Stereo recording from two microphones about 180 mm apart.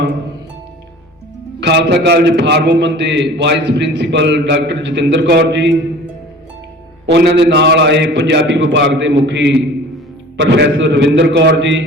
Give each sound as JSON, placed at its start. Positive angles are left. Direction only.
{"t": 1.6, "sound": "a man's voice", "side_deg": -70}
{"t": 7.1, "sound": "a man's voice", "side_deg": -70}